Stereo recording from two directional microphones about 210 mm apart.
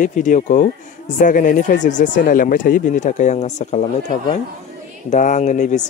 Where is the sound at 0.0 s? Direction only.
35° left (ahead or behind).